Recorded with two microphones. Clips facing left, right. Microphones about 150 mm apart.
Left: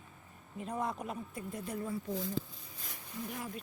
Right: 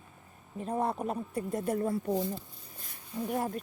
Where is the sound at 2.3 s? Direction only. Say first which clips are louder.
Left 6 dB; 90° left.